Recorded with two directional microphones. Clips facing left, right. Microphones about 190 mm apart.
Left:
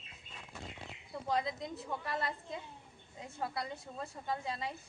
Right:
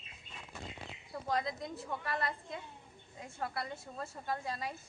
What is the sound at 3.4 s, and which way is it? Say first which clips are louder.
A woman's voice: even; centre (ahead or behind).